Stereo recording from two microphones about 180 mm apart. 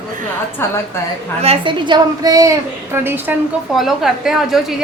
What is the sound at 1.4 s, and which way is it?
A woman's voice, 30° right (ahead or behind).